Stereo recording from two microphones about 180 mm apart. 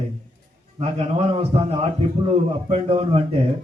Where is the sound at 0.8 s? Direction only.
35° right (ahead or behind).